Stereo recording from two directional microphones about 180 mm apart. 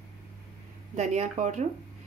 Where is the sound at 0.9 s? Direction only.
40° right (ahead or behind).